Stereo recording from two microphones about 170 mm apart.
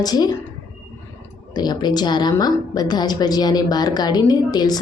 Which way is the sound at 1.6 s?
25° left (ahead or behind).